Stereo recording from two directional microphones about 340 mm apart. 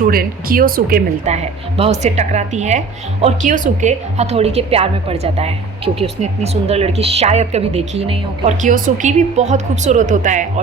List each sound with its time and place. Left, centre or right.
0.1 s a woman's voice: right